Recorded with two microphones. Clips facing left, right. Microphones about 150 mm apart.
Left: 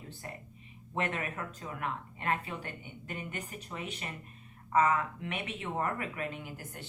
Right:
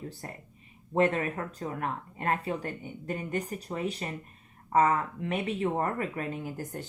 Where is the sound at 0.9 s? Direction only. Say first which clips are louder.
Right 8 dB; 35° right (ahead or behind).